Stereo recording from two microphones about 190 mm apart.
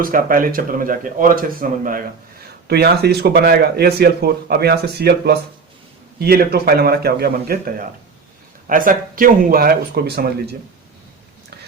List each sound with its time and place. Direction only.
0.0 s speech: 50° right (ahead or behind)
2.6 s speech: 55° right (ahead or behind)